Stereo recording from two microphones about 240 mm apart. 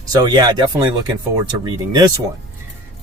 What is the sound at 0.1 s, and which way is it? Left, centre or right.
Speech, centre.